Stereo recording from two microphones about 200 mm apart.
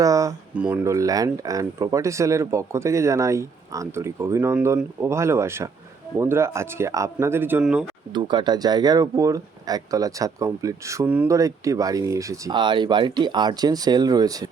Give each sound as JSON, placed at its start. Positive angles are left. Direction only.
{"t": 0.0, "sound": "speech", "side_deg": -15}
{"t": 8.1, "sound": "speech", "side_deg": -20}